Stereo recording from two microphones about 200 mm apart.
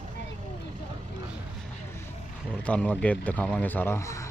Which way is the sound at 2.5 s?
5° left (ahead or behind).